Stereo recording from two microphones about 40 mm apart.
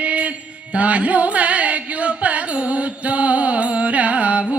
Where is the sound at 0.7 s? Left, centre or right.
Right.